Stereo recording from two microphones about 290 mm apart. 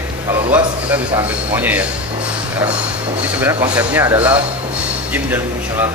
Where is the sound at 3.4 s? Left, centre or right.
Centre.